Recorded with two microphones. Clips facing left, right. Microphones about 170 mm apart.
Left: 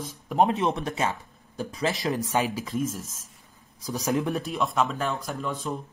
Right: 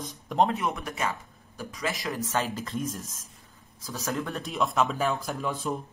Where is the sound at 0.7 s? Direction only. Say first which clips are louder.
Left 4 dB; 30° left (ahead or behind).